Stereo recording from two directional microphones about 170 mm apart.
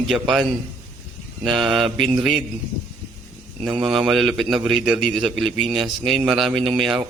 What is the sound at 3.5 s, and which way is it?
A man's voice, centre (ahead or behind).